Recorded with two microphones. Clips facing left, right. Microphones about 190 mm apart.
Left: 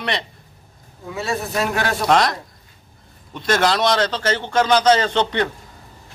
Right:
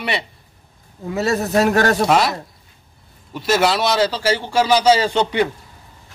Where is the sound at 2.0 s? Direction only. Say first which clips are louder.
Even; 5° right (ahead or behind).